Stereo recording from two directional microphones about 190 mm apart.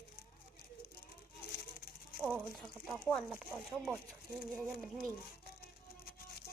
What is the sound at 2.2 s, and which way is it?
Speech, centre (ahead or behind).